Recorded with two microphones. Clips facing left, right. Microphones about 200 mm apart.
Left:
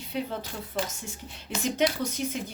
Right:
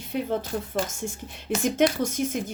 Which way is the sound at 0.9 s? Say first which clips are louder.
Right 7 dB; 50° right (ahead or behind).